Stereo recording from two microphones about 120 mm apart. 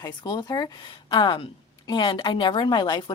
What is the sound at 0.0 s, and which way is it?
A woman's voice, 35° left (ahead or behind).